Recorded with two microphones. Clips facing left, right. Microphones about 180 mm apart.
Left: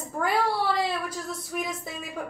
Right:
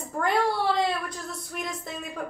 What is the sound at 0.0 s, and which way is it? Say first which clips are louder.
A woman's voice: right 1 dB; 5° left (ahead or behind).